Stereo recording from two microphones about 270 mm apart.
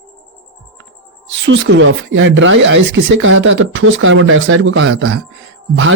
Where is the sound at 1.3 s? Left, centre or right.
Right.